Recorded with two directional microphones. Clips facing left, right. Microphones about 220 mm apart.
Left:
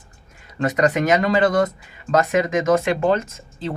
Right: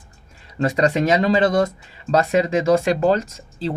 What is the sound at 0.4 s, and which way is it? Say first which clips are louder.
Speech: even; 30° right (ahead or behind).